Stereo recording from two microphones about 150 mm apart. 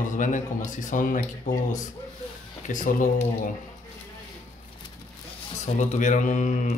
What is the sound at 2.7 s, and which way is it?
Speech, 55° left (ahead or behind).